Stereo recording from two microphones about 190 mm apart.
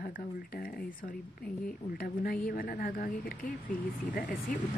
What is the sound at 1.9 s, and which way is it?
A woman's voice, 50° left (ahead or behind).